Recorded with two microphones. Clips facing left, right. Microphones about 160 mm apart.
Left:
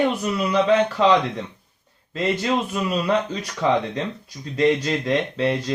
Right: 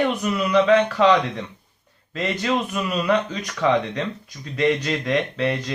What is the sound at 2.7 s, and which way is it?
Speech, 25° left (ahead or behind).